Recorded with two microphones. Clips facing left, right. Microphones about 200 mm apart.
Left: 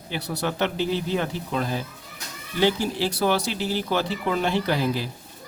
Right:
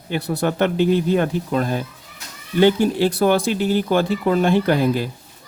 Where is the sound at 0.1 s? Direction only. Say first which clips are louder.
Right 7 dB; 50° right (ahead or behind).